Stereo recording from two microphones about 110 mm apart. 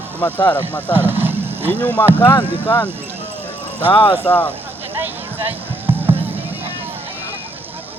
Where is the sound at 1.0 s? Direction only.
20° right (ahead or behind).